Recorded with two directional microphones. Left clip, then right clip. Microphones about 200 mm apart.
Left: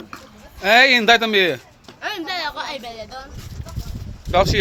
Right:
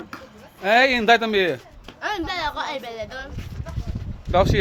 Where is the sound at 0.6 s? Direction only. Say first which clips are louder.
Left 4 dB; 5° left (ahead or behind).